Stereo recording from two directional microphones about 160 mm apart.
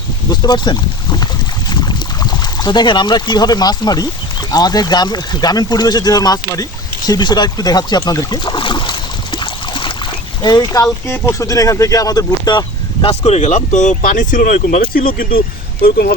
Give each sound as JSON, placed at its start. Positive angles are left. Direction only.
{"t": 0.3, "sound": "speech", "side_deg": 25}
{"t": 6.5, "sound": "a sound", "side_deg": 25}
{"t": 10.4, "sound": "speech", "side_deg": 25}